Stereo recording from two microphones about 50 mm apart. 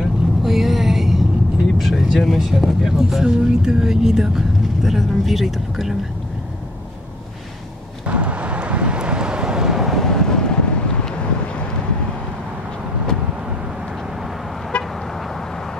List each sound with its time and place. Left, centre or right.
0.0 s vehicle: centre
1.8 s speech: centre
8.1 s vehicle: right; by 10.0 s centre
10.0 s vehicle: centre
14.7 s vehicle: left